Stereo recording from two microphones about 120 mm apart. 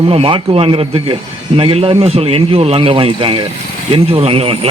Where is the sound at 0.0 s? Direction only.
50° right (ahead or behind).